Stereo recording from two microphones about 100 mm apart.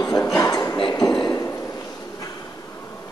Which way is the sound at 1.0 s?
10° left (ahead or behind).